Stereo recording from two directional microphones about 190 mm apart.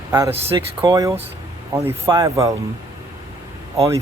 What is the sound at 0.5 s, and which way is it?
Speech, 20° right (ahead or behind).